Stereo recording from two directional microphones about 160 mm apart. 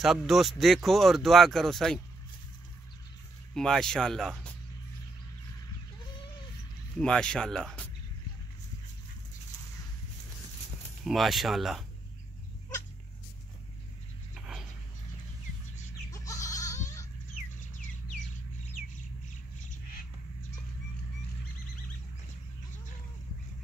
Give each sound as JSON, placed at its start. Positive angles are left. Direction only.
{"t": 0.0, "sound": "speech", "side_deg": 0}
{"t": 3.5, "sound": "speech", "side_deg": 5}
{"t": 7.0, "sound": "speech", "side_deg": 5}
{"t": 11.1, "sound": "speech", "side_deg": 0}
{"t": 14.3, "sound": "a sound", "side_deg": -5}
{"t": 16.1, "sound": "goat", "side_deg": 20}